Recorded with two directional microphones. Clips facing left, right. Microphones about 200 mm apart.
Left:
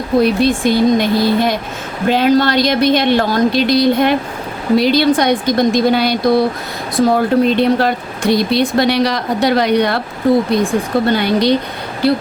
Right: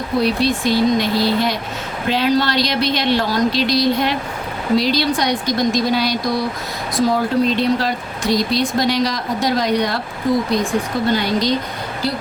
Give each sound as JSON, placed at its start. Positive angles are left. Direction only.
{"t": 0.2, "sound": "a woman's voice", "side_deg": 50}
{"t": 11.1, "sound": "speech", "side_deg": 60}